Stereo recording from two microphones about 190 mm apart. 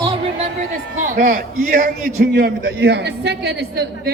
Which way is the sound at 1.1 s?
45° right (ahead or behind).